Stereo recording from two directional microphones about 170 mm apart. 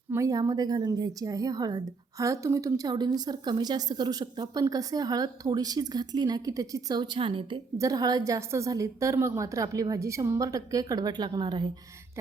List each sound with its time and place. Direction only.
0.1 s a woman's voice: 20° right (ahead or behind)